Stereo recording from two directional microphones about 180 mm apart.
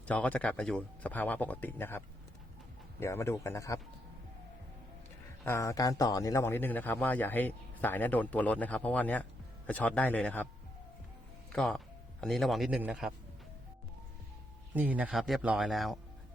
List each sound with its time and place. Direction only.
0.1 s a man's voice: 10° left (ahead or behind)
5.4 s a man's voice: 15° left (ahead or behind)
11.5 s speech: centre (ahead or behind)
14.7 s speech: 10° right (ahead or behind)